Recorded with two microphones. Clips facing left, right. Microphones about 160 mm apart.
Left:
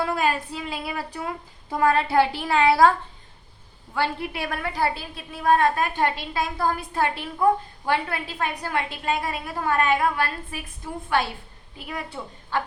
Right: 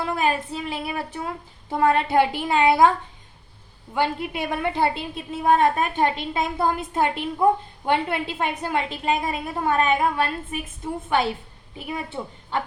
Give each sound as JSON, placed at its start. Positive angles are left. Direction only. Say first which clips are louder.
{"t": 0.0, "sound": "a woman's voice", "louder": "even", "side_deg": -20}
{"t": 3.9, "sound": "a woman's voice", "louder": "right 2 dB", "side_deg": -20}
{"t": 11.9, "sound": "a woman's voice", "louder": "right 3 dB", "side_deg": -20}